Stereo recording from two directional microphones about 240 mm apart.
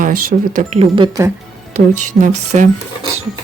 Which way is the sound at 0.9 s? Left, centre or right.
Centre.